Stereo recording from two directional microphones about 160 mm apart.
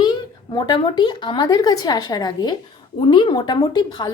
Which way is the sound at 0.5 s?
25° left (ahead or behind).